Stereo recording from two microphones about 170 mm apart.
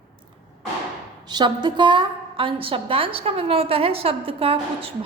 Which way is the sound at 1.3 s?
25° right (ahead or behind).